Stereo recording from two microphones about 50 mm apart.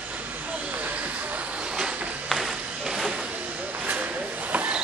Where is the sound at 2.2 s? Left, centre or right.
Centre.